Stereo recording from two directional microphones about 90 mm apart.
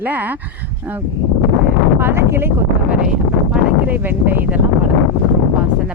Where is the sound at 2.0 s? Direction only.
25° right (ahead or behind).